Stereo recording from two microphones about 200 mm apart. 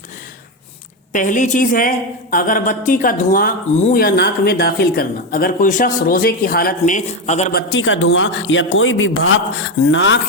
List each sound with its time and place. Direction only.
1.1 s a woman's voice: 40° left (ahead or behind)
7.5 s a man's voice: 65° left (ahead or behind)